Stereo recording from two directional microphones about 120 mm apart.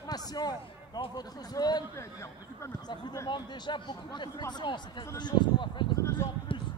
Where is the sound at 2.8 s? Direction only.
35° left (ahead or behind).